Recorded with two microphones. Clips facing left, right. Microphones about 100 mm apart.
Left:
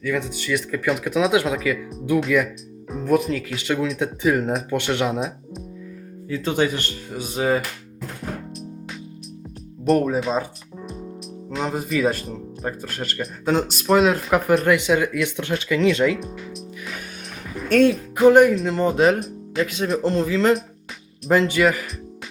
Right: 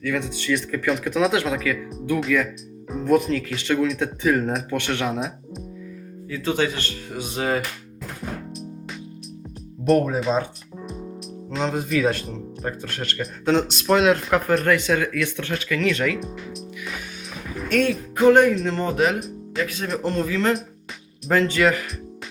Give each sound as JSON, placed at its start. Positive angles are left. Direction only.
{"t": 0.0, "sound": "speech", "side_deg": 5}
{"t": 2.9, "sound": "speech", "side_deg": 0}
{"t": 6.2, "sound": "speech", "side_deg": 25}
{"t": 7.1, "sound": "speech", "side_deg": 5}
{"t": 9.8, "sound": "speech", "side_deg": 0}
{"t": 11.5, "sound": "speech", "side_deg": 5}
{"t": 17.7, "sound": "music", "side_deg": 30}
{"t": 18.2, "sound": "speech", "side_deg": 10}
{"t": 18.9, "sound": "speech", "side_deg": 35}
{"t": 19.6, "sound": "speech", "side_deg": 20}